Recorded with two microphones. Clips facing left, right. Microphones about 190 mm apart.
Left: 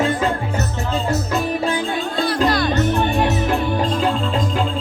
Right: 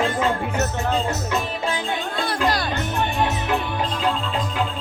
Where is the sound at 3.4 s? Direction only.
45° left (ahead or behind).